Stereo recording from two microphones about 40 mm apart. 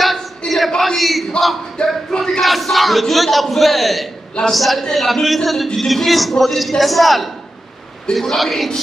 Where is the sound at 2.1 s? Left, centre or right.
Centre.